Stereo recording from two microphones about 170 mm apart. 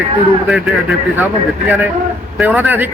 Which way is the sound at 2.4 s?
10° right (ahead or behind).